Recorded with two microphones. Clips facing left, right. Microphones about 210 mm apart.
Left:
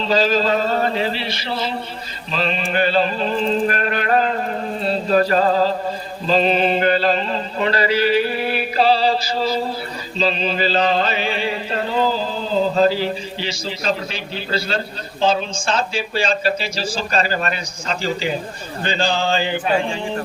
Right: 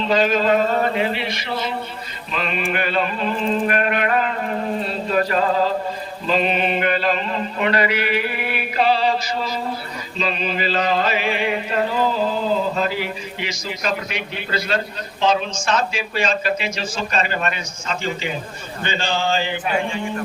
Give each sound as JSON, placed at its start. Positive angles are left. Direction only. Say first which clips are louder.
{"t": 0.0, "sound": "a woman's voice", "louder": "even", "side_deg": 35}
{"t": 2.3, "sound": "mantra", "louder": "left 2 dB", "side_deg": 30}
{"t": 10.2, "sound": "a sound", "louder": "left 3 dB", "side_deg": 30}
{"t": 12.7, "sound": "a woman's voice", "louder": "left 6 dB", "side_deg": 30}